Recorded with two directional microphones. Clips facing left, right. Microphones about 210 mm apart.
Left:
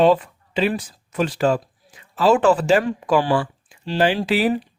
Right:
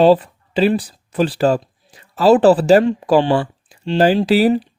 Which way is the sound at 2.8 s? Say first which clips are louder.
Right 5 dB; 25° right (ahead or behind).